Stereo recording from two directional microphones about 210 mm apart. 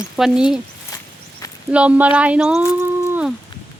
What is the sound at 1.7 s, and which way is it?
Speech, 5° right (ahead or behind).